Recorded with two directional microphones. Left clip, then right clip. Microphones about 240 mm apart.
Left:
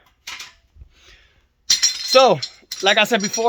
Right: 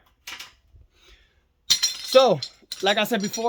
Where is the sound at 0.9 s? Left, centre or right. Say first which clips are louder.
Left 6 dB; centre.